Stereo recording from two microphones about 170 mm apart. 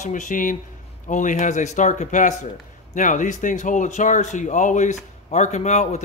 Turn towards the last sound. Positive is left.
turn(degrees=45)  # may be behind; listen again after turning